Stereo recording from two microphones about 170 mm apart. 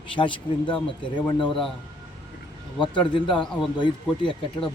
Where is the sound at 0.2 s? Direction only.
30° left (ahead or behind).